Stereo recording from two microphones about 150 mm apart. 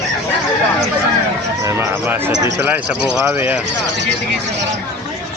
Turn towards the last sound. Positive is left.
turn(degrees=-10)  # may be behind; listen again after turning